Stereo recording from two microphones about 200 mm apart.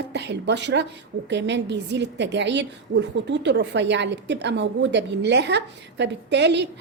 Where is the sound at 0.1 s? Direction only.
60° right (ahead or behind).